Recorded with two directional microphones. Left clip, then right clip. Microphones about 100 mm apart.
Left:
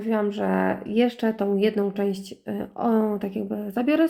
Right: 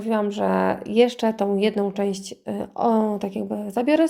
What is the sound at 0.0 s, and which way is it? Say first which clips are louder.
A woman's voice: right 2 dB; 30° right (ahead or behind).